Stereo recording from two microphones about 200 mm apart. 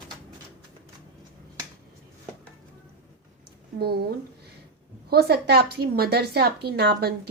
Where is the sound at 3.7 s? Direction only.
50° right (ahead or behind).